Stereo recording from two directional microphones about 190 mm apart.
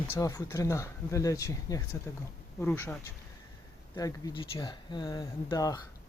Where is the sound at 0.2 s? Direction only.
20° left (ahead or behind).